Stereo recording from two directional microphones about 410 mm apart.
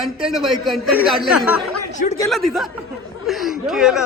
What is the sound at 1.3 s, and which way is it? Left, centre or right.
Speech, left.